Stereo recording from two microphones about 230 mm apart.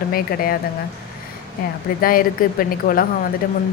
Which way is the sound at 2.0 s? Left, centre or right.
Left.